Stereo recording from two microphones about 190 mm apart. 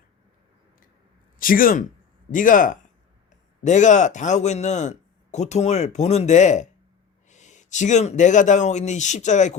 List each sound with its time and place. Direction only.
1.4 s speech: 45° left (ahead or behind)